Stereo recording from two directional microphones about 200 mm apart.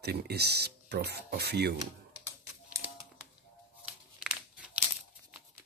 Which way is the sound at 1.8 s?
15° right (ahead or behind).